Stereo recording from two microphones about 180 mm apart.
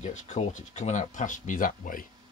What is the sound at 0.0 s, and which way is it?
Speech, 40° left (ahead or behind).